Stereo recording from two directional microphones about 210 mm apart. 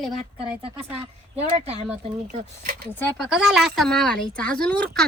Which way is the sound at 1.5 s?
30° right (ahead or behind).